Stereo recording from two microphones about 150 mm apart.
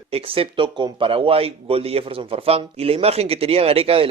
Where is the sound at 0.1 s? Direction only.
40° right (ahead or behind).